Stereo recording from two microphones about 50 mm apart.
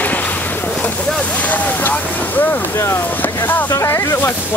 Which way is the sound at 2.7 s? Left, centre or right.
Left.